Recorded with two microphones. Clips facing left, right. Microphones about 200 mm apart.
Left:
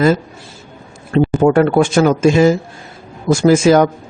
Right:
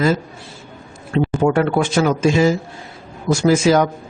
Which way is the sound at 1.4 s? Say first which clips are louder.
Left 5 dB; 50° left (ahead or behind).